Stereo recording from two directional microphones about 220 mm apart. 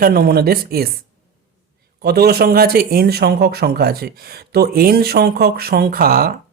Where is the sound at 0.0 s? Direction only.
45° right (ahead or behind).